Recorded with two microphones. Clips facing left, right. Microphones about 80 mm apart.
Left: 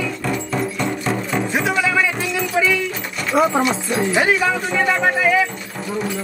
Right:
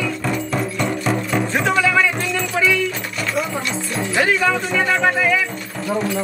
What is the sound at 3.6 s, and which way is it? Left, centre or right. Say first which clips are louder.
Music: left 4 dB; centre.